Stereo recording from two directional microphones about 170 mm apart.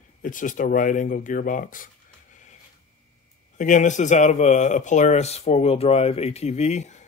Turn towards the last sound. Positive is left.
turn(degrees=40)  # may be behind; listen again after turning